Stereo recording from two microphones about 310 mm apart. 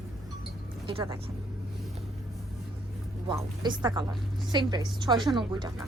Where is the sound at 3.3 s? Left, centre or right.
Centre.